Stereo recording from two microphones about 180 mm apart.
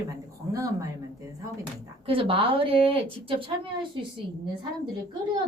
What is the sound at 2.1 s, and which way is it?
Speech, 30° right (ahead or behind).